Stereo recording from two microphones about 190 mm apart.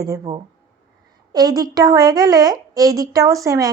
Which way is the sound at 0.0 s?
20° right (ahead or behind).